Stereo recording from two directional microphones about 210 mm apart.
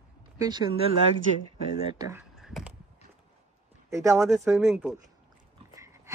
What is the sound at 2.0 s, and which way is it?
Speech, 15° right (ahead or behind).